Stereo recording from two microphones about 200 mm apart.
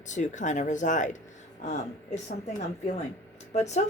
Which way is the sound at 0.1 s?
35° left (ahead or behind).